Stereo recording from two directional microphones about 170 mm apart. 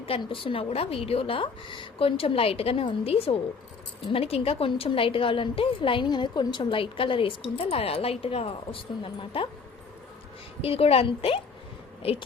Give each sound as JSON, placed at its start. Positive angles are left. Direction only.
{"t": 0.0, "sound": "a woman's voice", "side_deg": 30}
{"t": 10.6, "sound": "a woman's voice", "side_deg": 35}